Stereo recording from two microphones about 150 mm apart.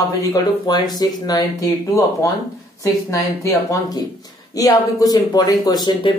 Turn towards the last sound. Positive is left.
turn(degrees=30)  # may be behind; listen again after turning